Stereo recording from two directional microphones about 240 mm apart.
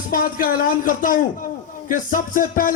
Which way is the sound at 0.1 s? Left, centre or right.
Left.